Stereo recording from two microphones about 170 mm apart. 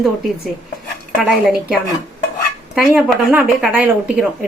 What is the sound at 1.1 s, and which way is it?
Speech, 5° right (ahead or behind).